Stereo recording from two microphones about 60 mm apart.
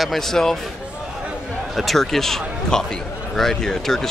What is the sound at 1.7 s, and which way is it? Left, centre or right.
Speech, centre.